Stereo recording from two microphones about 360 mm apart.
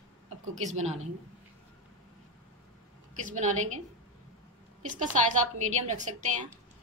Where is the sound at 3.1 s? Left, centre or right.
Centre.